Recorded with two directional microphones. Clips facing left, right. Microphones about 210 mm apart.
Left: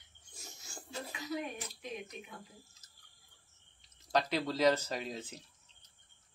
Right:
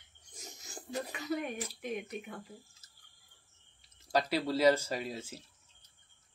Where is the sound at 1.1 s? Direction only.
60° right (ahead or behind).